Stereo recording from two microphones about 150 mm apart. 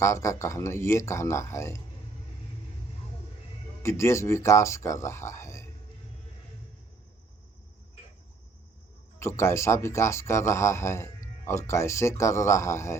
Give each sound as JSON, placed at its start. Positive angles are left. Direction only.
{"t": 0.0, "sound": "speech", "side_deg": 20}
{"t": 3.8, "sound": "speech", "side_deg": 20}
{"t": 9.1, "sound": "speech", "side_deg": 15}